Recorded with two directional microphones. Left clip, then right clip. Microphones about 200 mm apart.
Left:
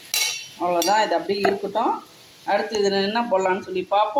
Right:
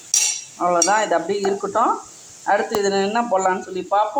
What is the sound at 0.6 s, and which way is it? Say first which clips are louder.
Speech: right 2 dB; 5° right (ahead or behind).